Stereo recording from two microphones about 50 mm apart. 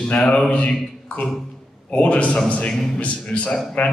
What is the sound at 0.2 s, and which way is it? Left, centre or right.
A man's voice, left.